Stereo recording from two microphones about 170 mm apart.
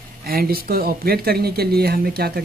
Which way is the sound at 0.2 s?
60° right (ahead or behind).